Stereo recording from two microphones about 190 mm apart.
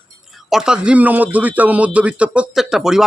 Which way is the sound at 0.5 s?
5° right (ahead or behind).